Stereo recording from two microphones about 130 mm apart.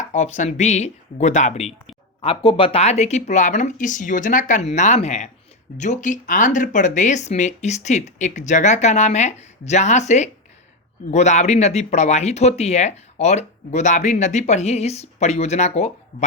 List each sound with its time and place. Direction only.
0.1 s speech: 70° left (ahead or behind)